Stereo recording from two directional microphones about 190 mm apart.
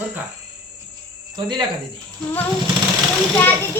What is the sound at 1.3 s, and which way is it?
Speech, 25° right (ahead or behind).